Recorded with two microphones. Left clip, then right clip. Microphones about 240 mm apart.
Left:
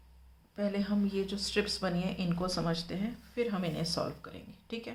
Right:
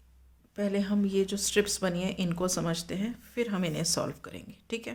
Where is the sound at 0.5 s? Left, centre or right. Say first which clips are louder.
Right 3 dB; right.